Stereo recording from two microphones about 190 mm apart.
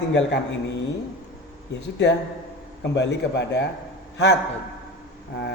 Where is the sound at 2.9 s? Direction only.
65° left (ahead or behind).